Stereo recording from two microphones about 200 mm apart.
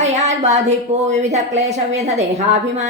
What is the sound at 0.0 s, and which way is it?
A woman's voice, 35° right (ahead or behind).